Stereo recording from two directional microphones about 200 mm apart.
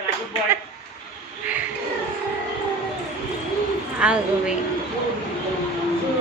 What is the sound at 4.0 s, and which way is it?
Speech, 5° right (ahead or behind).